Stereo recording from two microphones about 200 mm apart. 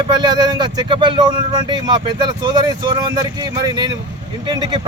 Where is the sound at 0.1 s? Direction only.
20° right (ahead or behind).